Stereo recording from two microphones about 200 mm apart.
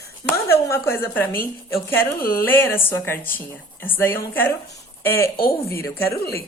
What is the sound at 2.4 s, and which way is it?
A woman's voice, 10° left (ahead or behind).